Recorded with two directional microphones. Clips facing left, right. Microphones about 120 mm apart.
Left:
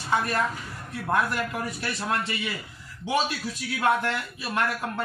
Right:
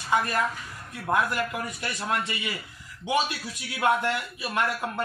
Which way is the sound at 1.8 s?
15° right (ahead or behind).